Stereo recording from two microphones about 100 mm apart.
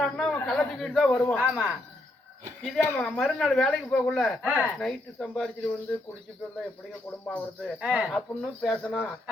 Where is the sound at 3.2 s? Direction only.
Centre (ahead or behind).